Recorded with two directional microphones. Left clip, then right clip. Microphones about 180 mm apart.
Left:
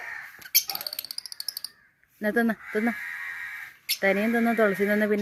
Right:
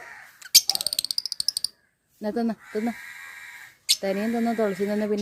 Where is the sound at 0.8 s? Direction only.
90° right.